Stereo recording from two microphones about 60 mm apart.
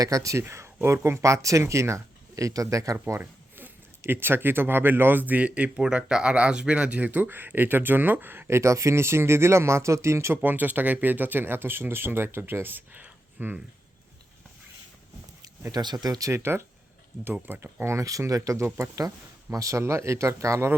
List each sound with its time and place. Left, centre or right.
0.0 s speech: right
0.4 s speech: right
4.0 s speech: right
10.3 s speech: right
15.7 s speech: right
16.3 s speech: right
17.4 s speech: right
18.3 s speech: right